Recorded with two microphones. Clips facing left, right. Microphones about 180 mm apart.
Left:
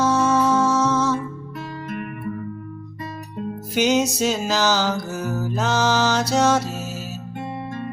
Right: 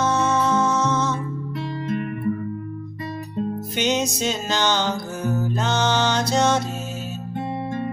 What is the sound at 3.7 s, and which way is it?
Music, 10° left (ahead or behind).